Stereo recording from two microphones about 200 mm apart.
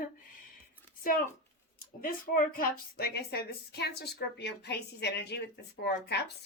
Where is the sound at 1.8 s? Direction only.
45° left (ahead or behind).